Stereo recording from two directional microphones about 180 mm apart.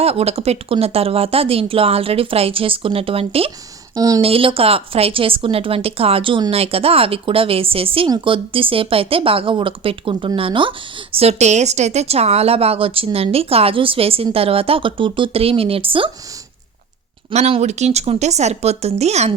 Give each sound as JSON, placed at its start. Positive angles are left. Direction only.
{"t": 0.0, "sound": "a woman's voice", "side_deg": -35}
{"t": 3.9, "sound": "a woman's voice", "side_deg": -20}
{"t": 4.2, "sound": "a woman's voice", "side_deg": -30}
{"t": 17.3, "sound": "a woman's voice", "side_deg": -35}